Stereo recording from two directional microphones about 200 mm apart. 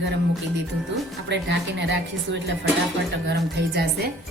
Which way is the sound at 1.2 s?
60° right (ahead or behind).